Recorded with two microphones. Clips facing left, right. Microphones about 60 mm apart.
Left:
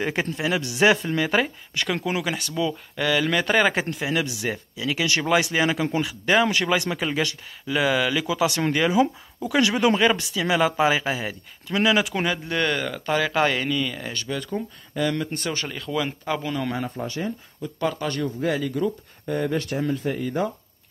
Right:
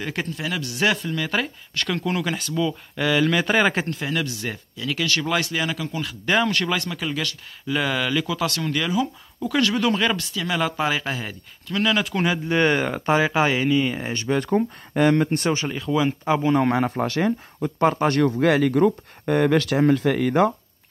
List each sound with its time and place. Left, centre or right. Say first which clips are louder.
0.0 s speech: left 3 dB; left
1.3 s speech: left 3 dB; centre
3.9 s speech: left 1 dB; centre
6.0 s speech: right 1 dB; centre
7.6 s speech: left 2 dB; centre
8.5 s speech: left 3 dB; left
9.4 s speech: left 1 dB; centre
12.4 s speech: right 5 dB; right
13.4 s speech: right 1 dB; centre
13.7 s speech: right 5 dB; right
14.4 s speech: right 8 dB; right
15.5 s speech: right 4 dB; centre
16.7 s speech: right 7 dB; right